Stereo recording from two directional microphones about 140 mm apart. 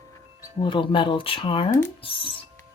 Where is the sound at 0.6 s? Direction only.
35° left (ahead or behind).